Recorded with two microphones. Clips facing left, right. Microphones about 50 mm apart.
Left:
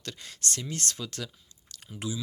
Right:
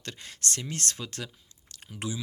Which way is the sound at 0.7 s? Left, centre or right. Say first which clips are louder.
Even; right.